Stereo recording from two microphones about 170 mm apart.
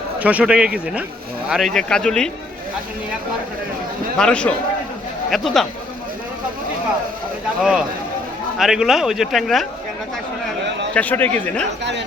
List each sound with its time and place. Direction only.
0.2 s a man's voice: 10° right (ahead or behind)
4.2 s a man's voice: 5° left (ahead or behind)
7.6 s a man's voice: 5° right (ahead or behind)
10.9 s speech: 10° left (ahead or behind)
11.8 s speech: 90° right